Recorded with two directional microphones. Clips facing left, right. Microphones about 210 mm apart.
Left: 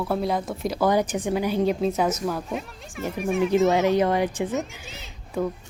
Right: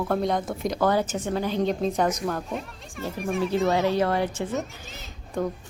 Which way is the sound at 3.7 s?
20° left (ahead or behind).